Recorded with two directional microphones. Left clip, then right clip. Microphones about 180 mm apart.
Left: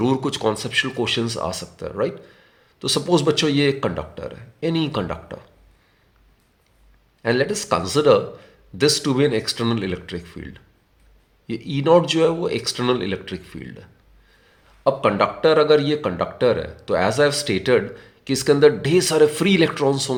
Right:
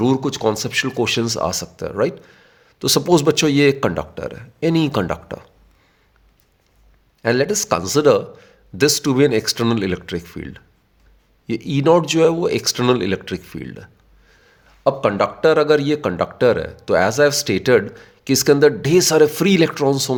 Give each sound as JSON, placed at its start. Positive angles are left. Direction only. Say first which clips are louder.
{"t": 0.0, "sound": "speech", "louder": "right 3 dB", "side_deg": -30}
{"t": 7.2, "sound": "speech", "louder": "right 3 dB", "side_deg": -45}